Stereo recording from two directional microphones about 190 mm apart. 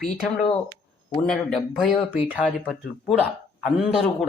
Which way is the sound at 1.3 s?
Centre (ahead or behind).